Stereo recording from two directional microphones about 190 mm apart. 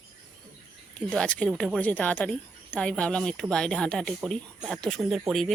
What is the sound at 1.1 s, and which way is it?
A woman's voice, 5° left (ahead or behind).